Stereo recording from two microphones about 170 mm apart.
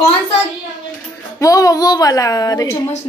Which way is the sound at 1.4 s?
20° left (ahead or behind).